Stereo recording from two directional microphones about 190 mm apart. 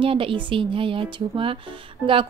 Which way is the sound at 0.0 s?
30° right (ahead or behind).